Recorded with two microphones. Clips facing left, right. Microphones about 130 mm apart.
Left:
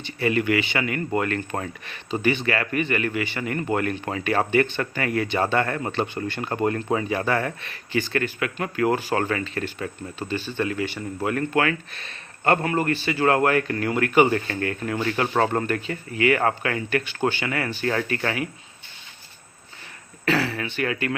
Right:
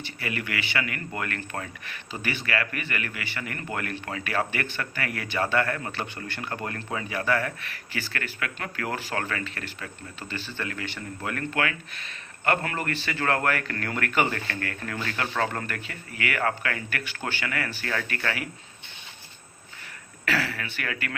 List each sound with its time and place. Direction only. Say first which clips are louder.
0.0 s speech: left 10 dB; 25° left (ahead or behind)
12.6 s speech: left 7 dB; 20° left (ahead or behind)
20.2 s speech: left 5 dB; 25° left (ahead or behind)